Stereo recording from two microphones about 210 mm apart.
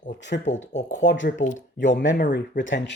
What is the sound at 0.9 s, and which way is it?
Speech, 60° left (ahead or behind).